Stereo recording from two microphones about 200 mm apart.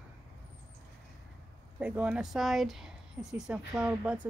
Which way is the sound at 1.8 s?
5° right (ahead or behind).